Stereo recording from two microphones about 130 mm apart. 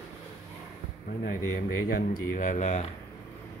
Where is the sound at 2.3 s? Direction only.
75° left (ahead or behind).